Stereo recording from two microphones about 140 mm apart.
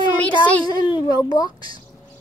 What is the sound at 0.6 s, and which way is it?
A child's voice, 30° left (ahead or behind).